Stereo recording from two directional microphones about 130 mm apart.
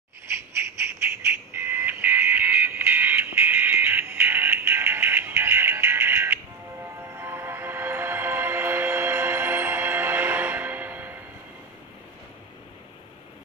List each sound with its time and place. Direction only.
0.3 s music: 20° right (ahead or behind)